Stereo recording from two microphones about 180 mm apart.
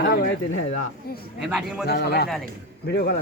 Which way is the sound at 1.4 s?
5° right (ahead or behind).